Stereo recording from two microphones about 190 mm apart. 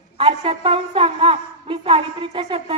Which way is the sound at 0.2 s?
30° right (ahead or behind).